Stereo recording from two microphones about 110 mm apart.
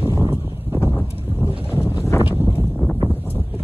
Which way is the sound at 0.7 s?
20° left (ahead or behind).